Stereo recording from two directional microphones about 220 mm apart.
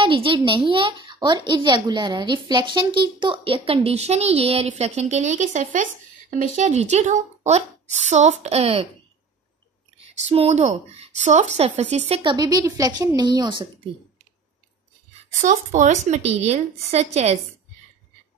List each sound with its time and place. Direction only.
0.0 s a woman's voice: 25° right (ahead or behind)
10.2 s speech: 30° right (ahead or behind)
15.4 s a woman's voice: 35° right (ahead or behind)